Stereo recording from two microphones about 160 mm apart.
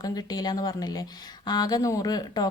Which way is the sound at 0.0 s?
25° left (ahead or behind).